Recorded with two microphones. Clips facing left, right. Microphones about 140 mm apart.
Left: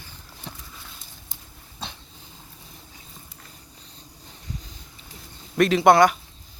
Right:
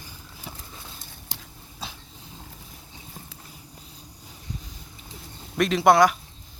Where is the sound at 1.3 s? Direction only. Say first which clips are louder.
Right 6 dB; 90° right.